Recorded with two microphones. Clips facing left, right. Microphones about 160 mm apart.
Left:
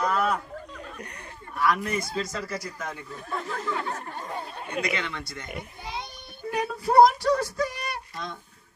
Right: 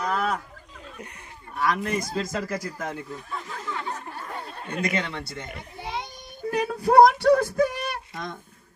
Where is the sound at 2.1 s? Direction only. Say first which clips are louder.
Right 3 dB; 45° right (ahead or behind).